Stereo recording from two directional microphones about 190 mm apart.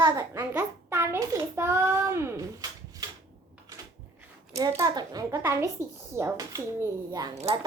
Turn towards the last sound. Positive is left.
turn(degrees=-20)  # may be behind; listen again after turning